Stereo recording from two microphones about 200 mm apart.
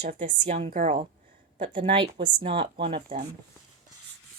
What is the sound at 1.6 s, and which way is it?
Speech, 25° right (ahead or behind).